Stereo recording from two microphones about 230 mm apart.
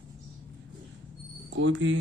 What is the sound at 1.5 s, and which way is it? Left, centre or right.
Speech, right.